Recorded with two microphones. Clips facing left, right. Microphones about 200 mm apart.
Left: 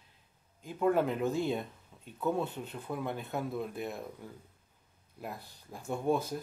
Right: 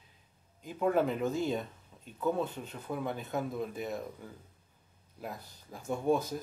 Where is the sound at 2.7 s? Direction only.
5° left (ahead or behind).